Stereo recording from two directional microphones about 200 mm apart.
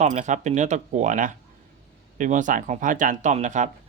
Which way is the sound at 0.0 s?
35° right (ahead or behind).